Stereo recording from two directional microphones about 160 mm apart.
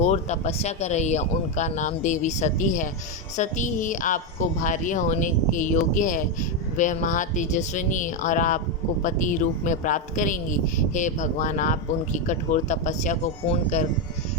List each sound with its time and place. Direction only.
0.0 s speech: 45° left (ahead or behind)